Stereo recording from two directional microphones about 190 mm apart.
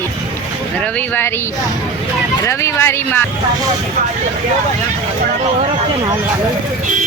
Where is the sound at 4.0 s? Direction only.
40° right (ahead or behind).